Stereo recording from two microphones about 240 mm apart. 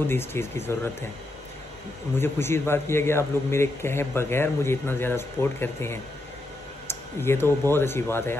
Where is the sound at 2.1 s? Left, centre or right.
Centre.